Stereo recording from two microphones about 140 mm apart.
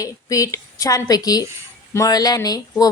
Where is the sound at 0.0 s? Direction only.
25° left (ahead or behind).